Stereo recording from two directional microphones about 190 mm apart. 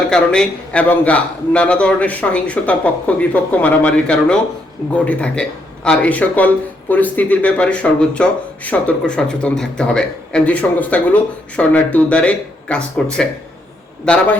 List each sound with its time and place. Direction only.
0.1 s a man's voice: 5° left (ahead or behind)
14.0 s a man's voice: 5° left (ahead or behind)